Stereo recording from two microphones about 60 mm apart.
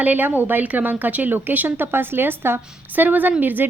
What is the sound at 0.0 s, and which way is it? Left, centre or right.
Speech, right.